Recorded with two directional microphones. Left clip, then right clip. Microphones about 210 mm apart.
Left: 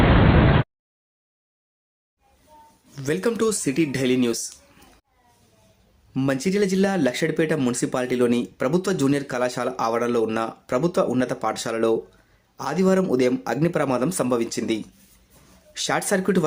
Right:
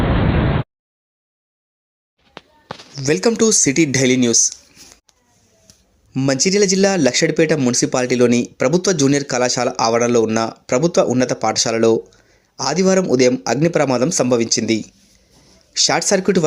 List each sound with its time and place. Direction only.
0.0 s a sound: centre (ahead or behind)
2.9 s speech: 25° right (ahead or behind)
6.1 s speech: 25° right (ahead or behind)